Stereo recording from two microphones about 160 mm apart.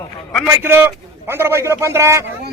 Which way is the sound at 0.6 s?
15° right (ahead or behind).